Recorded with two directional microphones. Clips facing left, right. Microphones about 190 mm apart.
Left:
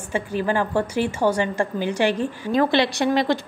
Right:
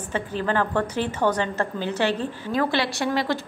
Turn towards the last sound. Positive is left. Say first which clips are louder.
# left 4 dB
turn(degrees=15)  # may be behind; listen again after turning